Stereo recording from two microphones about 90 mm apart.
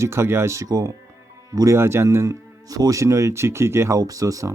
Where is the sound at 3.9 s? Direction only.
40° right (ahead or behind).